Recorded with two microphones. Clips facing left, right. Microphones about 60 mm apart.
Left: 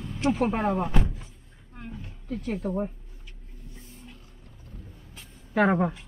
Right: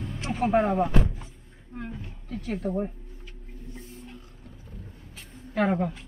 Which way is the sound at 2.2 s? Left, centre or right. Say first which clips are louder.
Left 1 dB; centre.